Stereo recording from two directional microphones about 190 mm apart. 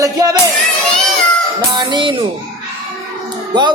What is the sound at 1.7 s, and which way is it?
Speech, 25° right (ahead or behind).